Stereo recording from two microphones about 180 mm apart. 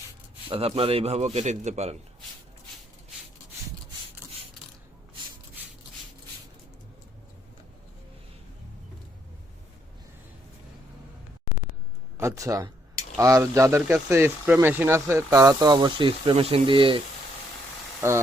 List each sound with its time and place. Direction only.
0.5 s speech: 30° right (ahead or behind)
12.1 s speech: 15° right (ahead or behind)
18.0 s speech: 15° right (ahead or behind)